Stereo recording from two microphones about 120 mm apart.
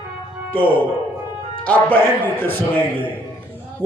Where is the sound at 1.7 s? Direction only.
10° left (ahead or behind).